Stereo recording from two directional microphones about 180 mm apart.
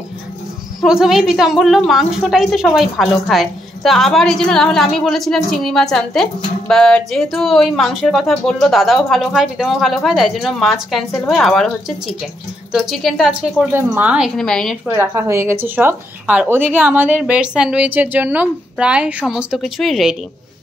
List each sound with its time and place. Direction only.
0.7 s a woman's voice: 5° right (ahead or behind)
15.0 s a woman's voice: 15° right (ahead or behind)